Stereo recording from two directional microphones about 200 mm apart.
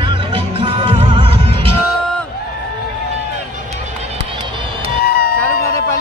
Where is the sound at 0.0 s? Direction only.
25° right (ahead or behind).